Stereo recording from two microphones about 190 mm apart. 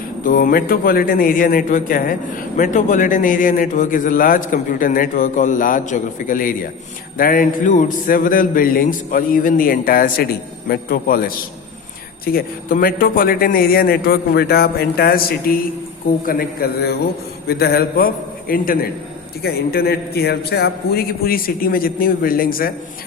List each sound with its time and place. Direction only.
0.3 s a man's voice: 45° left (ahead or behind)